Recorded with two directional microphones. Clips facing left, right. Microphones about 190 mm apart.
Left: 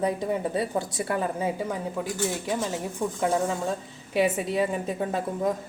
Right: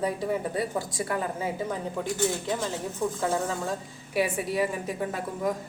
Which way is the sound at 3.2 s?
20° left (ahead or behind).